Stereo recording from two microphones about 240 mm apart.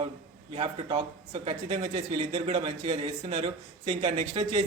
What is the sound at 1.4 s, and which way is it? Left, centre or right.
Speech, right.